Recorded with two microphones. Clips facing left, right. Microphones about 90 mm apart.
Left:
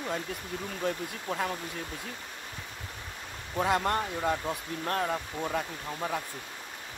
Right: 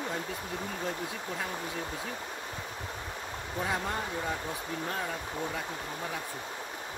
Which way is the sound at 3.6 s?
70° left (ahead or behind).